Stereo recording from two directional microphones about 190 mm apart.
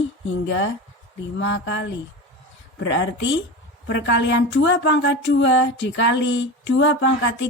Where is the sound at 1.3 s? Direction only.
75° left (ahead or behind).